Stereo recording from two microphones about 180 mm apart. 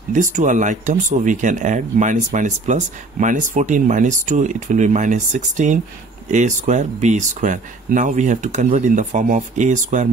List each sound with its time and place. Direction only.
0.1 s speech: 45° right (ahead or behind)